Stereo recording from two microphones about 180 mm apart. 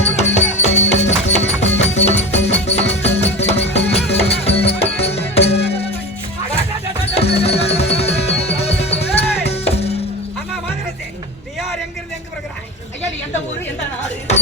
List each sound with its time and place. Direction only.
0.2 s music: 40° left (ahead or behind)
7.0 s music: 35° left (ahead or behind)